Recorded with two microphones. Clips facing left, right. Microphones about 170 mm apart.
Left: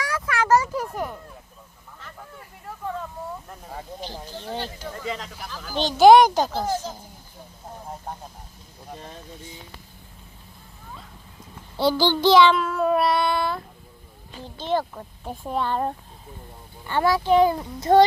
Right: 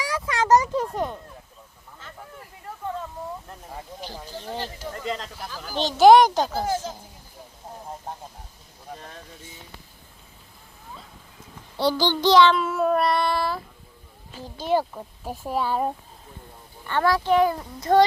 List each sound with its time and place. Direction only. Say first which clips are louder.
0.0 s a sound: even; 15° right (ahead or behind)
4.0 s speech: left 1 dB; 5° right (ahead or behind)
5.5 s speech: left 1 dB; 5° right (ahead or behind)
11.8 s child singing: left 2 dB; 5° left (ahead or behind)
12.6 s speech: even; 5° right (ahead or behind)
16.8 s speech: left 1 dB; 10° left (ahead or behind)
17.2 s a child's voice: left 2 dB; 25° left (ahead or behind)